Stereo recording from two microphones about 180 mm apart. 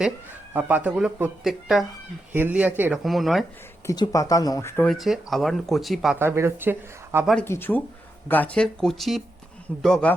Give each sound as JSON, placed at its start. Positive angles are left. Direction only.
{"t": 0.5, "sound": "speech", "side_deg": -10}
{"t": 3.8, "sound": "speech", "side_deg": 20}
{"t": 4.9, "sound": "speech", "side_deg": 0}
{"t": 6.1, "sound": "speech", "side_deg": -15}
{"t": 7.4, "sound": "speech", "side_deg": 10}